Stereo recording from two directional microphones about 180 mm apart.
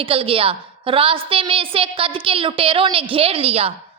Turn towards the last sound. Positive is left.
turn(degrees=-35)  # may be behind; listen again after turning